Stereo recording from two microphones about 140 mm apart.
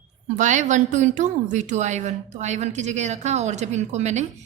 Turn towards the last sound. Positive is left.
turn(degrees=-55)  # may be behind; listen again after turning